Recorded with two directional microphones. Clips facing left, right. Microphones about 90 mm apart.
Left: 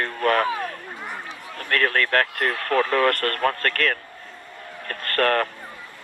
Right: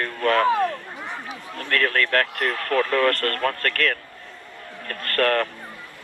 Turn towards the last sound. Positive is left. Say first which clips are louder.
# even
turn(degrees=30)  # may be behind; listen again after turning